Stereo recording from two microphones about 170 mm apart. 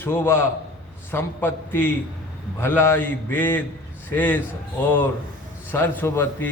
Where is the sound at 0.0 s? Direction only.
15° left (ahead or behind).